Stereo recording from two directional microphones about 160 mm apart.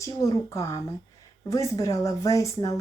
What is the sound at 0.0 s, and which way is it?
Speech, 20° left (ahead or behind).